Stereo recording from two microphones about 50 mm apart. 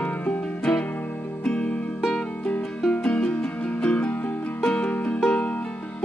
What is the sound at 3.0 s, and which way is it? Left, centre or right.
Music, centre.